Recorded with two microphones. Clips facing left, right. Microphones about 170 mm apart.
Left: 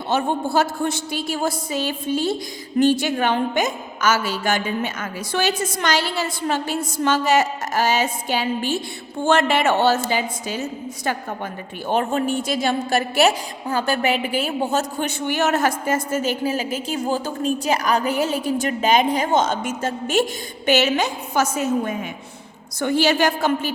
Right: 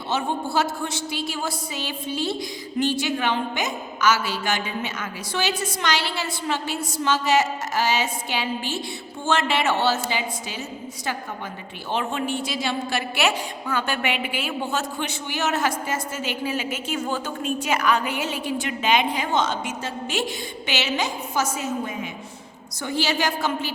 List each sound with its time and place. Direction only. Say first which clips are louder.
0.1 s a woman's voice: left 4 dB; 50° left (ahead or behind)
11.9 s a woman's voice: left 5 dB; 45° left (ahead or behind)
22.8 s a woman's voice: left 6 dB; 55° left (ahead or behind)